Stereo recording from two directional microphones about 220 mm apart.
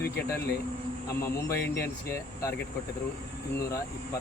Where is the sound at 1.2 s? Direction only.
15° left (ahead or behind).